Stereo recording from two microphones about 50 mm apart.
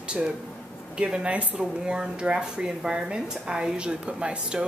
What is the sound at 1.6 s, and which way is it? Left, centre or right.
Speech, centre.